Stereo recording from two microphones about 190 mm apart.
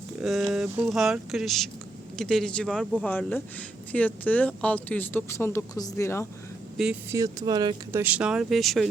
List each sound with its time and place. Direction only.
0.2 s a sound: centre (ahead or behind)
0.5 s speech: 5° right (ahead or behind); by 6.2 s 15° left (ahead or behind)
6.7 s speech: 5° right (ahead or behind)
7.1 s speech: 15° right (ahead or behind)
8.0 s speech: 5° right (ahead or behind)